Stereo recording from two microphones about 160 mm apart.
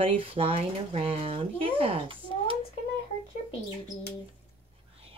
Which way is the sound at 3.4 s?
30° left (ahead or behind).